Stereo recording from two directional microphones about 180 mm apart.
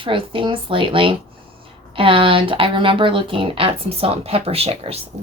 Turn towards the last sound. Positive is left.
turn(degrees=-35)  # may be behind; listen again after turning